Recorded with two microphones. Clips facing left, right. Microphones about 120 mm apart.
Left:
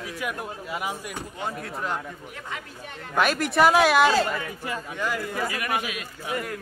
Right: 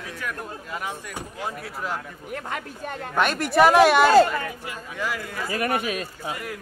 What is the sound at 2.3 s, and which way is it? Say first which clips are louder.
Speech: right 5 dB; 50° right (ahead or behind).